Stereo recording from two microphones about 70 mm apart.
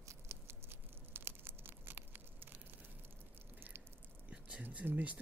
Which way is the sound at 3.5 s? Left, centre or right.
Right.